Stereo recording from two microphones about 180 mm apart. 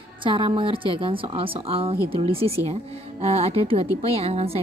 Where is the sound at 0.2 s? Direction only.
30° right (ahead or behind).